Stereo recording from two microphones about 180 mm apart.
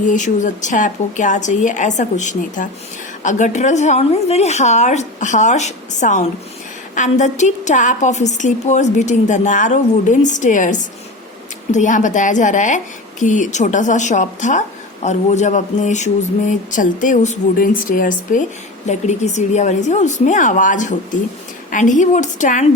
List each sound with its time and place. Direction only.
0.0 s a woman's voice: 45° left (ahead or behind)